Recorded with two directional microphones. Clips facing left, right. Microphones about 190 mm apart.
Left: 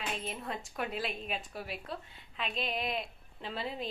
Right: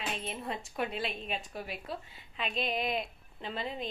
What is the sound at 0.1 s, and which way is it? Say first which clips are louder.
A woman's voice: right 1 dB; centre (ahead or behind).